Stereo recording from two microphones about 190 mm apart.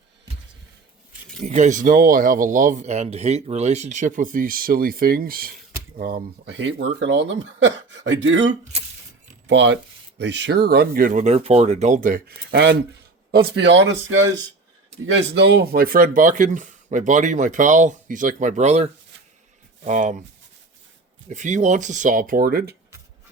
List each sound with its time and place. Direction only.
1.5 s speech: 40° right (ahead or behind); by 12.7 s 55° right (ahead or behind)
13.5 s speech: 65° right (ahead or behind)
15.0 s speech: 65° right (ahead or behind); by 20.1 s 40° right (ahead or behind)
21.2 s speech: 40° right (ahead or behind)